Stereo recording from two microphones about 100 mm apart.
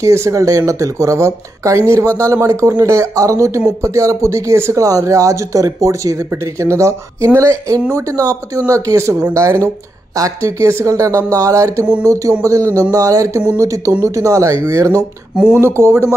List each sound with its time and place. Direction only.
0.0 s speech: 30° right (ahead or behind)
15.3 s speech: 10° right (ahead or behind)
15.6 s speech: 25° right (ahead or behind)